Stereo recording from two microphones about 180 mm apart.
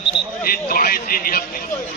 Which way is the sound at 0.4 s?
55° left (ahead or behind).